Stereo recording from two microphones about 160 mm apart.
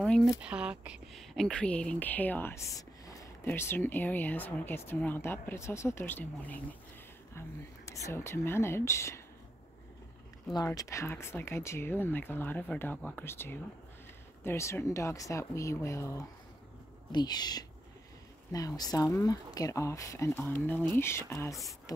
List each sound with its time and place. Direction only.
0.0 s speech: centre (ahead or behind); by 9.2 s 15° left (ahead or behind)
10.5 s speech: 20° left (ahead or behind)